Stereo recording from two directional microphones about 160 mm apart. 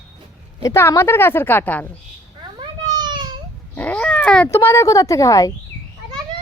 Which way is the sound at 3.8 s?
10° left (ahead or behind).